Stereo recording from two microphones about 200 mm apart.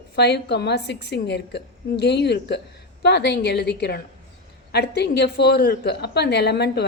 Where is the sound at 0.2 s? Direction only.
55° left (ahead or behind).